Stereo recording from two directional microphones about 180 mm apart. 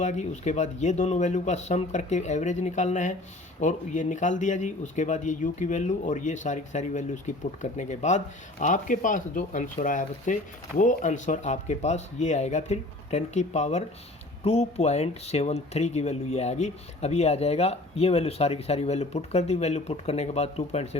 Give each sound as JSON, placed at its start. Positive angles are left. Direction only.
{"t": 0.0, "sound": "speech", "side_deg": 40}